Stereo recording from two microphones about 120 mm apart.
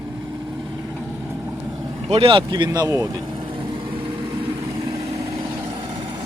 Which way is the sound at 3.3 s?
45° right (ahead or behind).